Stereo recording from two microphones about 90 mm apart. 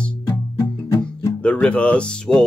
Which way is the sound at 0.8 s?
40° left (ahead or behind).